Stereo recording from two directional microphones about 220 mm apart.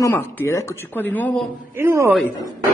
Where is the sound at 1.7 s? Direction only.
10° right (ahead or behind).